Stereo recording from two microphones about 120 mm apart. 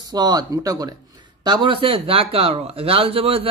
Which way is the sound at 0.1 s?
35° right (ahead or behind).